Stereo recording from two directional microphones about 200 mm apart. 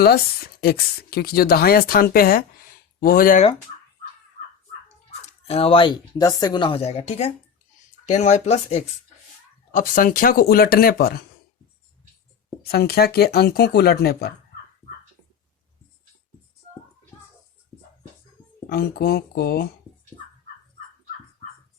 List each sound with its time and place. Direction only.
0.6 s speech: 50° left (ahead or behind)
5.2 s speech: 30° left (ahead or behind); by 11.3 s 50° left (ahead or behind)
12.6 s speech: 50° left (ahead or behind)
18.7 s speech: 50° left (ahead or behind)